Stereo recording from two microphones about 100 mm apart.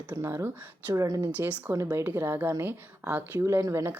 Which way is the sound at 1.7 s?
30° right (ahead or behind).